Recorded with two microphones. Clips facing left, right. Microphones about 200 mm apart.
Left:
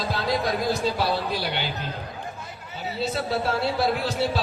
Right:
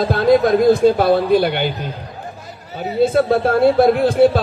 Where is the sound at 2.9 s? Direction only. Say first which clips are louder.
Right 13 dB; 50° right (ahead or behind).